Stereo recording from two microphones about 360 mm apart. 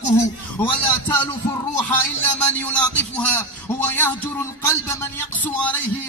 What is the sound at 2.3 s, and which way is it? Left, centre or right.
A man's voice, centre.